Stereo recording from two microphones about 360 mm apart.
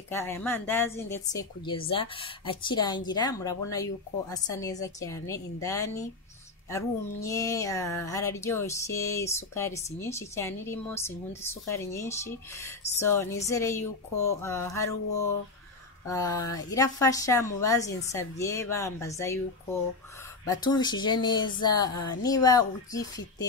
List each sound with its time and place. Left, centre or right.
0.1 s speech: centre
16.1 s speech: centre